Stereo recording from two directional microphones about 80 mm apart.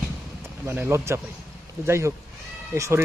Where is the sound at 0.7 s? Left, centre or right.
Right.